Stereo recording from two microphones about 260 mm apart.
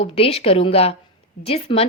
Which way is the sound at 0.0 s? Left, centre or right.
Left.